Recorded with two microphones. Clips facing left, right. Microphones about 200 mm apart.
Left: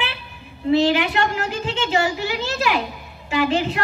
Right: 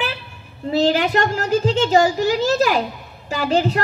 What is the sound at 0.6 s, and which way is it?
A woman's voice, 40° right (ahead or behind).